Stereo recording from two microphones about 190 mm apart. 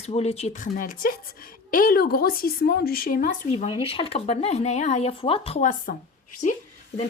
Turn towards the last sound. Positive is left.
turn(degrees=40)  # may be behind; listen again after turning